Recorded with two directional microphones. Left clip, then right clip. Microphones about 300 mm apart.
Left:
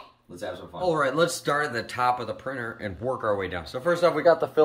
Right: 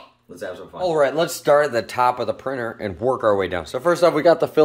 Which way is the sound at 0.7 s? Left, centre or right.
Centre.